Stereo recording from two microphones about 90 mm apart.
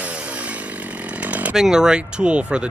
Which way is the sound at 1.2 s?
15° right (ahead or behind).